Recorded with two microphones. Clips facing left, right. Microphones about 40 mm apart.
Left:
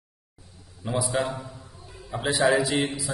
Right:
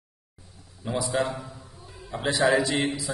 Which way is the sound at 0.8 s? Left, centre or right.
Centre.